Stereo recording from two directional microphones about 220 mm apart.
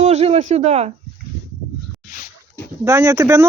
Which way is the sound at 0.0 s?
30° right (ahead or behind).